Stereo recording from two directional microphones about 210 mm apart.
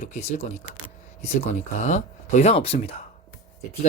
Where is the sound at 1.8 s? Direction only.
35° left (ahead or behind).